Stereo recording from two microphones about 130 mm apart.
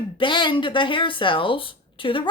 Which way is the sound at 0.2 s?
40° left (ahead or behind).